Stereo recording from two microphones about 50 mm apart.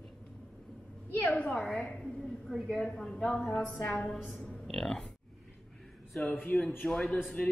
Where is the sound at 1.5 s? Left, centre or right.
Centre.